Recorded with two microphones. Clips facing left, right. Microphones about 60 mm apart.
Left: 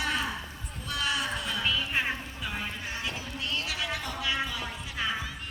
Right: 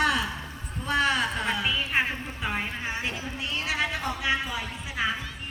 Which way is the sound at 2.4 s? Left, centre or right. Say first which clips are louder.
Right 5 dB; right.